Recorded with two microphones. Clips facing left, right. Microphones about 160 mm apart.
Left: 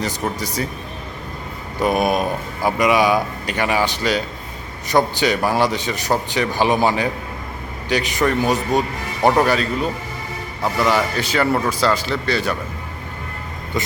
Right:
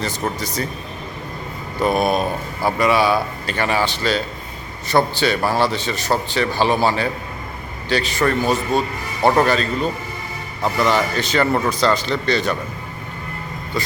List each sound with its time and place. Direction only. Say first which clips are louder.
0.0 s a man's voice: even; 10° left (ahead or behind)
1.8 s a man's voice: even; 10° left (ahead or behind)
13.7 s speech: left 1 dB; 20° left (ahead or behind)